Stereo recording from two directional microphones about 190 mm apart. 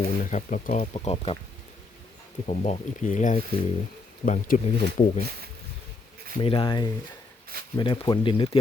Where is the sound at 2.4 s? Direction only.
35° left (ahead or behind).